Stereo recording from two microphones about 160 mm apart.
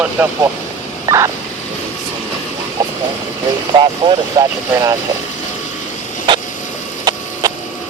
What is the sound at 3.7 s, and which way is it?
Speech, 30° right (ahead or behind).